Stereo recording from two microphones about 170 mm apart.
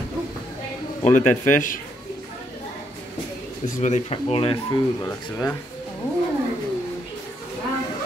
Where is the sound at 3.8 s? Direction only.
40° left (ahead or behind).